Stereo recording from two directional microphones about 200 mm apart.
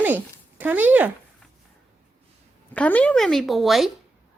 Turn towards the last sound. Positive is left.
turn(degrees=0)  # may be behind; listen again after turning